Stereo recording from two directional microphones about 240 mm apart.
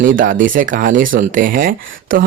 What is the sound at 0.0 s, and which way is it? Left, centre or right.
Speech, right.